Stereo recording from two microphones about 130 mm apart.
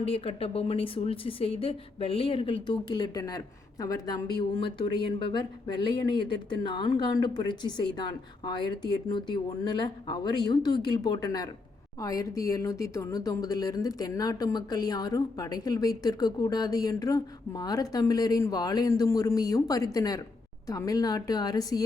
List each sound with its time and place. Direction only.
0.0 s speech: 50° left (ahead or behind)
2.6 s a woman's voice: 35° left (ahead or behind)